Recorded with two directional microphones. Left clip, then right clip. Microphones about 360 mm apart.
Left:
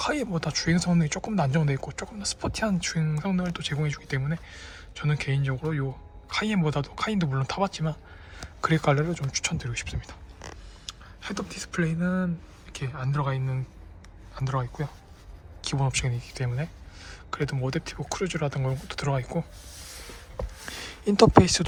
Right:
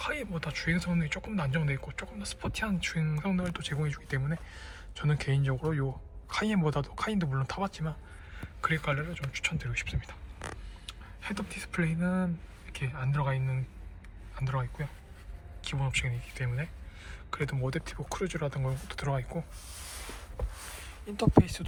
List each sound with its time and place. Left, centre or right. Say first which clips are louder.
0.0 s speech: left 7 dB; centre
21.2 s speech: left 9 dB; centre